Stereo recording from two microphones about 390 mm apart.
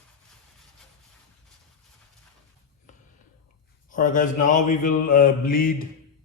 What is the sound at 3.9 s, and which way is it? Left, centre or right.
Mantra, centre.